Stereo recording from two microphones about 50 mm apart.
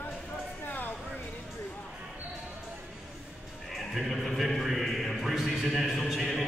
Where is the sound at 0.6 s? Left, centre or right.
Left.